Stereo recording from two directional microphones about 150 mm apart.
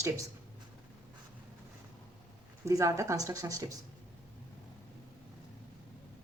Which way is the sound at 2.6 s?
20° right (ahead or behind).